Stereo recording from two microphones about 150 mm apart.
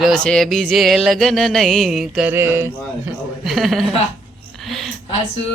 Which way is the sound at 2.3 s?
20° right (ahead or behind).